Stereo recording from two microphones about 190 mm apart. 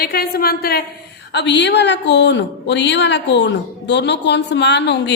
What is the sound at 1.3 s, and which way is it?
A woman's voice, 65° left (ahead or behind).